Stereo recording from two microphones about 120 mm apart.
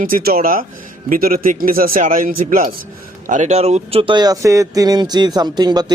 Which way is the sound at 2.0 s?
90° right.